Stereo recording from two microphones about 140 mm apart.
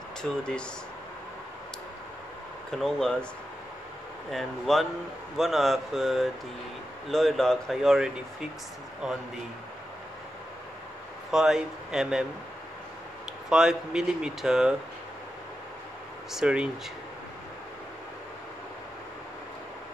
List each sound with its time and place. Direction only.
0.2 s speech: 5° left (ahead or behind)
2.7 s speech: 5° left (ahead or behind)
4.3 s speech: centre (ahead or behind)
11.3 s speech: 5° right (ahead or behind)
13.5 s speech: 5° right (ahead or behind)
16.3 s speech: 5° right (ahead or behind)